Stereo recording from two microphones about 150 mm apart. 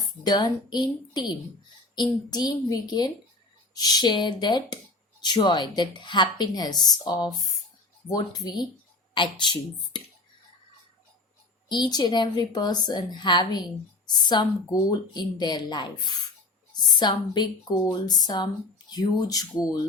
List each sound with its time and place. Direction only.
0.3 s a woman's voice: 25° left (ahead or behind)
11.7 s a woman's voice: 30° left (ahead or behind)